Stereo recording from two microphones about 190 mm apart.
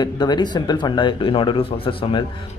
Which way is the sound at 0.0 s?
25° left (ahead or behind).